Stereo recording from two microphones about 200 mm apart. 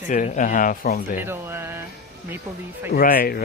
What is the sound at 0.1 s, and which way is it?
Speech, 40° left (ahead or behind).